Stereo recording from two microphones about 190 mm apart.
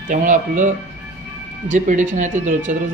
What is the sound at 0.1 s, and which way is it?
Speech, 40° right (ahead or behind).